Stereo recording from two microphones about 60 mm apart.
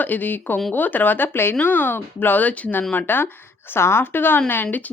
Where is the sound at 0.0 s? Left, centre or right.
Left.